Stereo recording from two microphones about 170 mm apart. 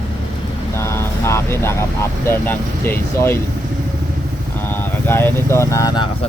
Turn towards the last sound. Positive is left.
turn(degrees=15)  # may be behind; listen again after turning